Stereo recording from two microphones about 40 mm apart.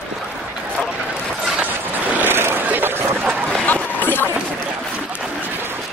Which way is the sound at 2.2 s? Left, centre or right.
Right.